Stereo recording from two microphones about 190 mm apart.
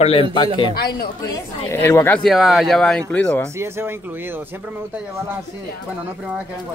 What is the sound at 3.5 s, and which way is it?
Speech, 15° right (ahead or behind).